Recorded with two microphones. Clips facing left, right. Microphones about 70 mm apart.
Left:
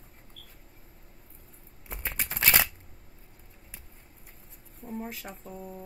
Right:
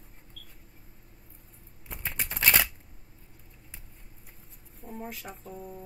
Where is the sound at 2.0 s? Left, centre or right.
Centre.